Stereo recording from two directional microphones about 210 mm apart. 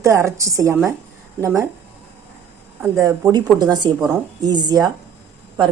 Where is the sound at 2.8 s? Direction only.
15° right (ahead or behind).